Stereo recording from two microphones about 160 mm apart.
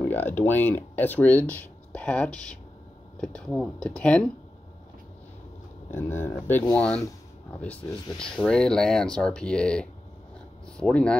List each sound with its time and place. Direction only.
0.1 s speech: 10° left (ahead or behind)
5.9 s speech: 15° left (ahead or behind)